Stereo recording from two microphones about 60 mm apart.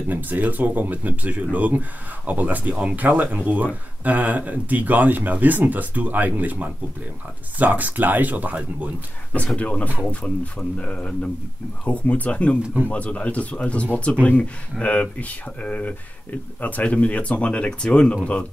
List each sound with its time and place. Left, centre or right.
0.1 s speech: right
9.6 s speech: left